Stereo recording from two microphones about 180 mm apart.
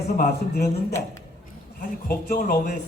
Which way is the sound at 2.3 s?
55° left (ahead or behind).